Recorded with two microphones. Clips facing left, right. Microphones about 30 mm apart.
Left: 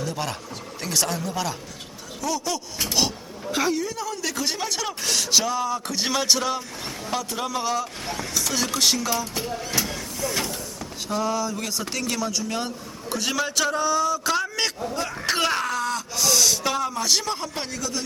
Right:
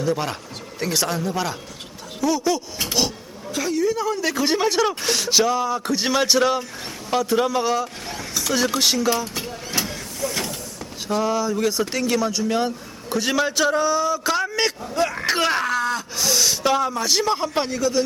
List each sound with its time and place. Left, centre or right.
0.0 s speech: centre
8.0 s vehicle: centre
8.4 s a sound: centre
11.1 s a man's voice: centre
14.9 s speech: right
15.3 s speech: centre
17.3 s speech: centre